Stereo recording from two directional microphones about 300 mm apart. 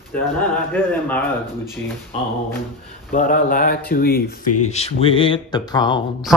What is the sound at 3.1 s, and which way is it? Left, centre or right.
Speech, left.